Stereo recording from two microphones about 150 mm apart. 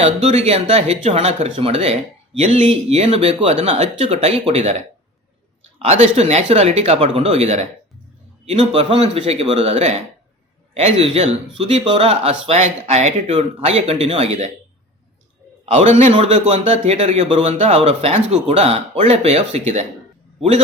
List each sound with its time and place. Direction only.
0.0 s speech: 45° right (ahead or behind)
5.8 s speech: 45° right (ahead or behind)
15.6 s speech: 50° right (ahead or behind)